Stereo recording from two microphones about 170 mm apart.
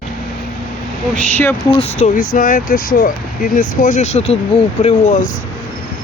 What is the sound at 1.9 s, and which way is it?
Speech, 50° left (ahead or behind).